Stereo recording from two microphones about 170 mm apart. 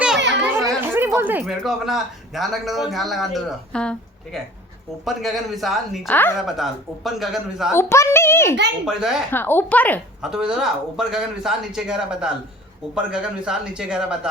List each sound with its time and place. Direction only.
0.2 s children playing: 90° right
0.9 s speech: 15° right (ahead or behind)
6.1 s a child's voice: 10° left (ahead or behind)
6.6 s speech: centre (ahead or behind)
7.7 s a child's voice: 15° left (ahead or behind)
8.9 s speech: 5° right (ahead or behind)
9.3 s a child's voice: 10° left (ahead or behind)
10.2 s speech: 5° right (ahead or behind)